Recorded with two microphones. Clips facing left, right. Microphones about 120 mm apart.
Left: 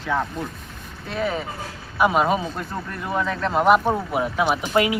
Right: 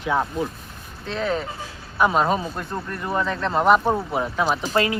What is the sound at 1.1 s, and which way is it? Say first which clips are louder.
Speech: right 1 dB; 10° left (ahead or behind).